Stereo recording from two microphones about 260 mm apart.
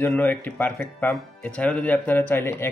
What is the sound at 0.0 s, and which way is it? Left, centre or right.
Speech, centre.